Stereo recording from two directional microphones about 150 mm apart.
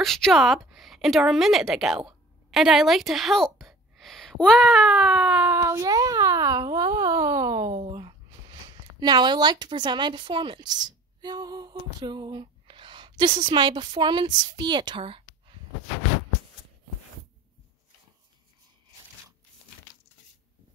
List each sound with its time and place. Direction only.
0.0 s a woman's voice: centre (ahead or behind)
5.6 s a woman's voice: 25° right (ahead or behind)